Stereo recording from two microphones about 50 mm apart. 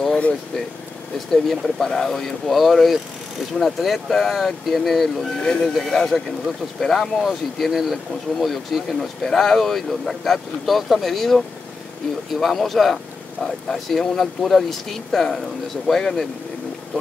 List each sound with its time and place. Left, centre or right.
0.1 s vehicle: centre
1.3 s speech: centre